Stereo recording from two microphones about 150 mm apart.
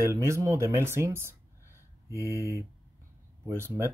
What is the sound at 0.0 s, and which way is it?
Speech, 20° right (ahead or behind).